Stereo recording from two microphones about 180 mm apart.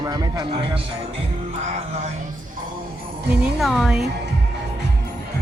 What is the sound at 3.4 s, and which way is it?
Speech, centre (ahead or behind).